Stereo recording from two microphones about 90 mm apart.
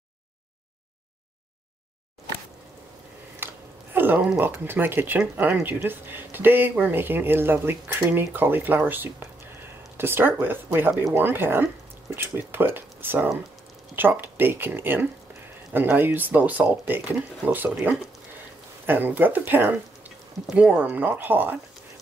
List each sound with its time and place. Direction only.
3.4 s a sound: 25° right (ahead or behind)
4.4 s speech: 25° right (ahead or behind)
20.4 s speech: 10° right (ahead or behind)